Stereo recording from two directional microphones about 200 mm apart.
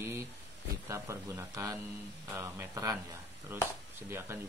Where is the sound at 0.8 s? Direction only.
15° right (ahead or behind).